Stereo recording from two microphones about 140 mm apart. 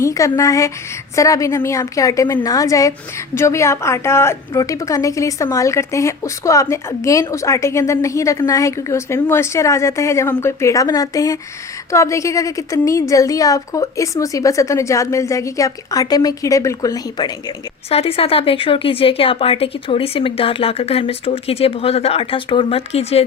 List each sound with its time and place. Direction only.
0.0 s a woman's voice: 25° left (ahead or behind)
17.8 s speech: 45° left (ahead or behind)